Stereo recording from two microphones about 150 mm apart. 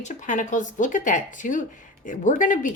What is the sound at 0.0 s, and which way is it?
Speech, 55° left (ahead or behind).